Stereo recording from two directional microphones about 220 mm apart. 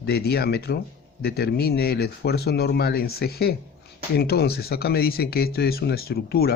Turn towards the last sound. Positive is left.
turn(degrees=45)  # may be behind; listen again after turning